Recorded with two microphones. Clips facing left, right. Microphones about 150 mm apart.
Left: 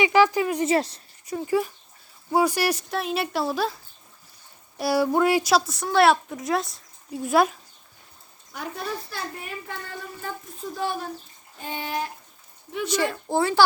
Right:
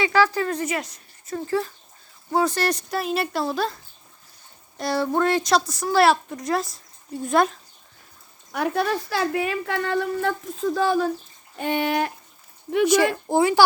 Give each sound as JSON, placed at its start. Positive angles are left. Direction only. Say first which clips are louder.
{"t": 0.0, "sound": "a woman's voice", "louder": "left 1 dB", "side_deg": 15}
{"t": 0.6, "sound": "speech", "louder": "left 5 dB", "side_deg": 30}
{"t": 1.3, "sound": "a woman's voice", "louder": "left 1 dB", "side_deg": 15}
{"t": 4.8, "sound": "a woman's voice", "louder": "left 1 dB", "side_deg": 10}
{"t": 8.5, "sound": "a woman's voice", "louder": "right 9 dB", "side_deg": -70}
{"t": 11.5, "sound": "speech", "louder": "right 8 dB", "side_deg": -70}
{"t": 13.2, "sound": "speech", "louder": "left 1 dB", "side_deg": -15}